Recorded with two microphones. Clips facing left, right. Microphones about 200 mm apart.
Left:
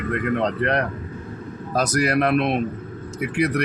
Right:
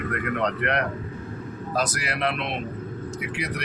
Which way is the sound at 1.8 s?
45° left (ahead or behind).